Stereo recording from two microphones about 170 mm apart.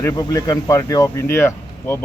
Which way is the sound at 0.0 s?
20° left (ahead or behind).